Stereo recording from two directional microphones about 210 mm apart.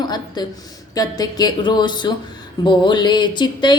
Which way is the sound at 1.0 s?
20° left (ahead or behind).